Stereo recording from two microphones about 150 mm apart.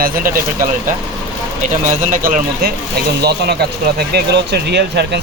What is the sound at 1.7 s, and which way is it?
Speech, 60° right (ahead or behind).